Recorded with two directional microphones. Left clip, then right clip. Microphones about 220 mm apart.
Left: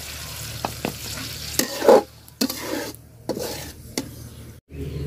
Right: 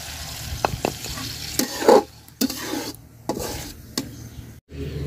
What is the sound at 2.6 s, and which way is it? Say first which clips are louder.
Stir: even; 10° left (ahead or behind).